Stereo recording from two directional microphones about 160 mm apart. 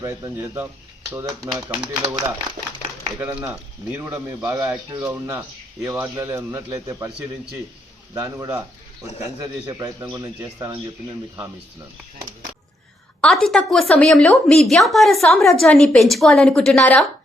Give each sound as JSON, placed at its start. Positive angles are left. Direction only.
{"t": 0.0, "sound": "a man's voice", "side_deg": -15}
{"t": 5.1, "sound": "a man's voice", "side_deg": -15}
{"t": 8.1, "sound": "a man's voice", "side_deg": -15}
{"t": 13.2, "sound": "a woman's voice", "side_deg": 5}